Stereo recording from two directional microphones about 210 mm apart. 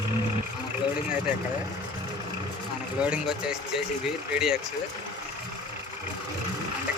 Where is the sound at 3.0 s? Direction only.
5° right (ahead or behind).